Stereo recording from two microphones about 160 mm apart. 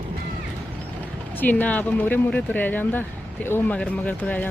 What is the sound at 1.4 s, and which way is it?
Speech, 10° left (ahead or behind).